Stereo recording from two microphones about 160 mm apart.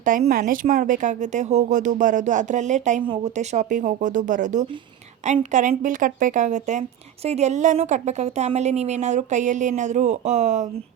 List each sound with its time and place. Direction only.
0.0 s a woman's voice: 55° right (ahead or behind)